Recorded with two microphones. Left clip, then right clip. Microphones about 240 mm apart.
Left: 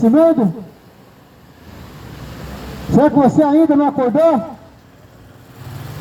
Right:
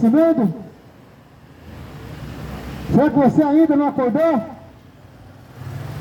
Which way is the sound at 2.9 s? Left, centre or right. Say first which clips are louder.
Left 3 dB; left.